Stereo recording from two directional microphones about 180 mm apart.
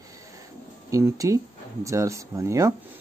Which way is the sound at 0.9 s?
20° right (ahead or behind).